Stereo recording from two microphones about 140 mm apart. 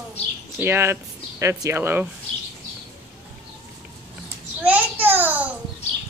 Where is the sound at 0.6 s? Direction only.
15° right (ahead or behind).